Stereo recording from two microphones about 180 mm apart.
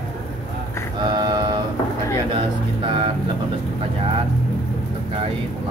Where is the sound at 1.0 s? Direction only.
25° right (ahead or behind).